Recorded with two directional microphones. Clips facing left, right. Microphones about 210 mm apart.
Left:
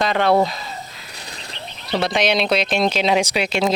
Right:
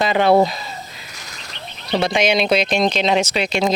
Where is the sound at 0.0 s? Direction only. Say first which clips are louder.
Right 2 dB; 5° right (ahead or behind).